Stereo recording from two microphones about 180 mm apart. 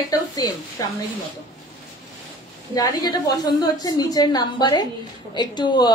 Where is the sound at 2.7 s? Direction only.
20° left (ahead or behind).